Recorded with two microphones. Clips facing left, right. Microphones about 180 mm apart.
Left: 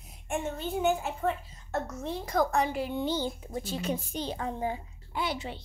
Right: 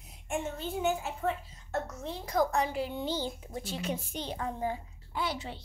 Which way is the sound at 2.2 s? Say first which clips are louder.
Left 1 dB; 55° left (ahead or behind).